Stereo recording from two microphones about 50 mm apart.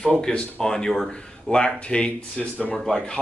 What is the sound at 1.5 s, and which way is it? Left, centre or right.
Speech, centre.